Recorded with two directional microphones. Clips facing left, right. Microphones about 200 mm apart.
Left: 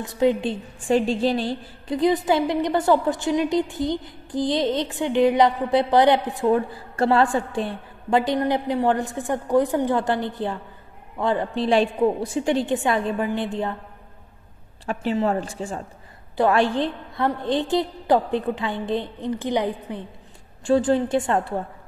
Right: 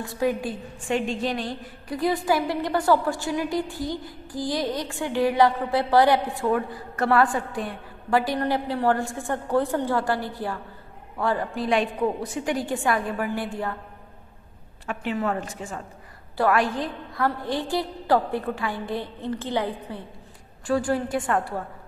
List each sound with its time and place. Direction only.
0.0 s a woman's voice: 20° left (ahead or behind)
14.9 s a woman's voice: 30° left (ahead or behind)